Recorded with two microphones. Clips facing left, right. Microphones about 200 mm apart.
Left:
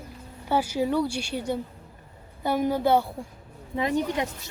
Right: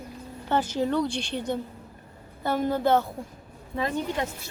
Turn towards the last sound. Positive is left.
turn(degrees=15)  # may be behind; listen again after turning